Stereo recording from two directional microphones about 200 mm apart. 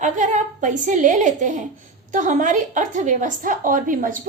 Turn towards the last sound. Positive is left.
turn(degrees=-40)  # may be behind; listen again after turning